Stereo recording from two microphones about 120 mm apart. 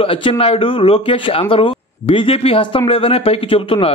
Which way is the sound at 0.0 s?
45° left (ahead or behind).